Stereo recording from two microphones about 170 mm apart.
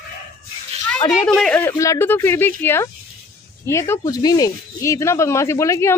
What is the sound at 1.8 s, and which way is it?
Speech, 15° left (ahead or behind).